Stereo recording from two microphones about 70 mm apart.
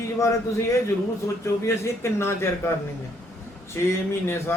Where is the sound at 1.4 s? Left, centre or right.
Left.